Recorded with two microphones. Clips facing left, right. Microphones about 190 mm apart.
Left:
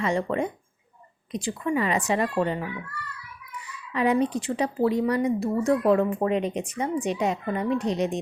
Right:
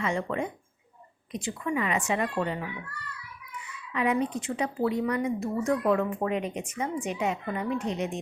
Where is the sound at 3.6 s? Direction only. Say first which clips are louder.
Left 4 dB; 35° left (ahead or behind).